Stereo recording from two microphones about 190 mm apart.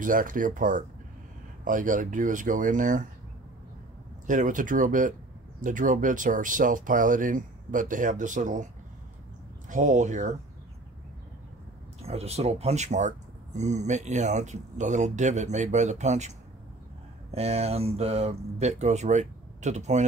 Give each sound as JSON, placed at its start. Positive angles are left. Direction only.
{"t": 0.0, "sound": "speech", "side_deg": -45}
{"t": 4.3, "sound": "speech", "side_deg": -45}
{"t": 9.7, "sound": "speech", "side_deg": -40}
{"t": 12.0, "sound": "speech", "side_deg": -35}